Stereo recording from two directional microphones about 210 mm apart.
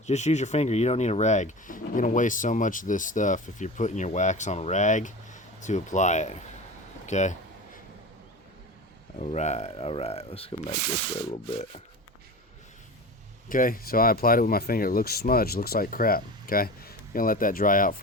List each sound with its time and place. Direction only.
0.0 s speech: 35° left (ahead or behind)
9.1 s speech: 35° left (ahead or behind)
13.5 s speech: 40° left (ahead or behind)